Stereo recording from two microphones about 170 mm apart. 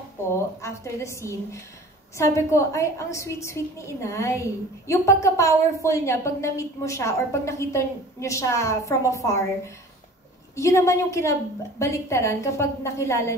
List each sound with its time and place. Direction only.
0.6 s a woman's voice: 15° left (ahead or behind)
10.5 s a woman's voice: 20° left (ahead or behind)